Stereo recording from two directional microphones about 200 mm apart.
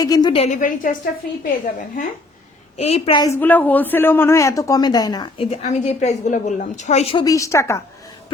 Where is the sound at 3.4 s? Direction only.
10° left (ahead or behind); by 7.2 s 30° left (ahead or behind).